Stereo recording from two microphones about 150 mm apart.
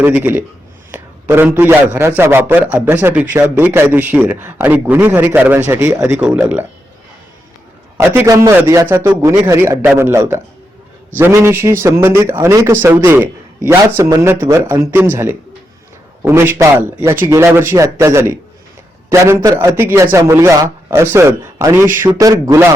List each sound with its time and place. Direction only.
0.0 s a man's voice: 10° right (ahead or behind)
6.1 s a man's voice: 5° right (ahead or behind)
7.9 s a man's voice: 15° right (ahead or behind)